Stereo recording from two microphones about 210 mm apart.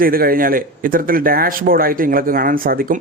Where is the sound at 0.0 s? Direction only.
45° right (ahead or behind).